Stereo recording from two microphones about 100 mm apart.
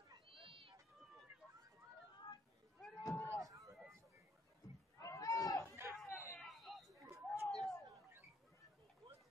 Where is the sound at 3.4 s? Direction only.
35° right (ahead or behind).